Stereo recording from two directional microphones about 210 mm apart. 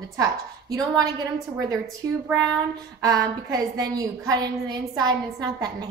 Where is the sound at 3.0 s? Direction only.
15° right (ahead or behind).